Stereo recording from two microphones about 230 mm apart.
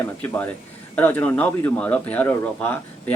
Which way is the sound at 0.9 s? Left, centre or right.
Centre.